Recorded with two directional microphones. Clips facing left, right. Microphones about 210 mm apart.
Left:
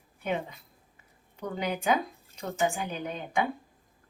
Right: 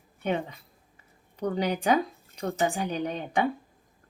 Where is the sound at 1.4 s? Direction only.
40° right (ahead or behind).